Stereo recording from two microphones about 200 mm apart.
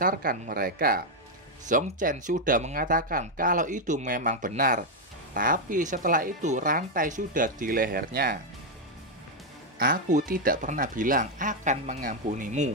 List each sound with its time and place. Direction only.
0.0 s speech: 45° right (ahead or behind)
9.8 s speech: 40° right (ahead or behind)